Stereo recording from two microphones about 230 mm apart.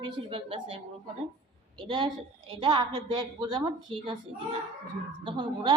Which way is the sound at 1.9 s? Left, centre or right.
Right.